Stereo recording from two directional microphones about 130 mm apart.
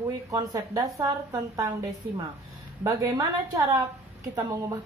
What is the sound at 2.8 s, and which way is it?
A woman's voice, 25° right (ahead or behind).